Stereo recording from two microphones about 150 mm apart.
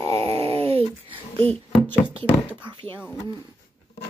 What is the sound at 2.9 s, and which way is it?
Speech, 5° right (ahead or behind).